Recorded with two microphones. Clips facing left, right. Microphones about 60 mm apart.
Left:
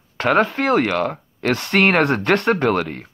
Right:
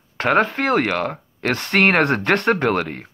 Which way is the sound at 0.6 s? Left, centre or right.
Right.